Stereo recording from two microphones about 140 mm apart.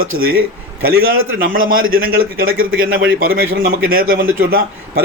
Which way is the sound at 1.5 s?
90° right.